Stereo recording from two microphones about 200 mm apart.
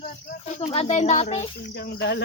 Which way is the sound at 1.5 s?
50° left (ahead or behind).